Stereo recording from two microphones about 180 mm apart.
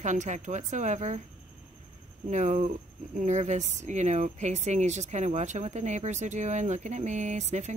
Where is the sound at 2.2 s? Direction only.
40° right (ahead or behind).